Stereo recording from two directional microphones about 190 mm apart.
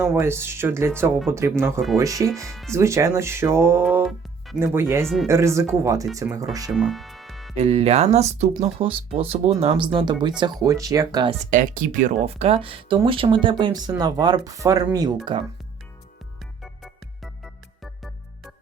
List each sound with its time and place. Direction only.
0.0 s speech: 15° right (ahead or behind)
5.0 s speech: centre (ahead or behind)
5.3 s speech: 15° right (ahead or behind)
6.2 s speech: 5° right (ahead or behind)
6.7 s music: centre (ahead or behind)
7.5 s speech: 35° right (ahead or behind)
11.5 s speech: 45° right (ahead or behind); by 15.4 s 25° right (ahead or behind)